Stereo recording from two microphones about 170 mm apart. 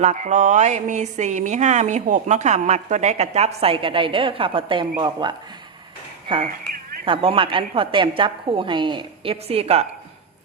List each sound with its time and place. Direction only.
0.0 s a woman's voice: 45° right (ahead or behind)